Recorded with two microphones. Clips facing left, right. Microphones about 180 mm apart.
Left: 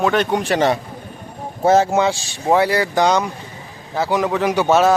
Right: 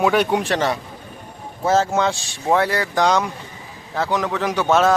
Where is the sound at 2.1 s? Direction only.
5° left (ahead or behind).